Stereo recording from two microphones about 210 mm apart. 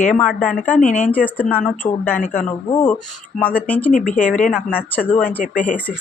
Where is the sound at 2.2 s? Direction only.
40° left (ahead or behind).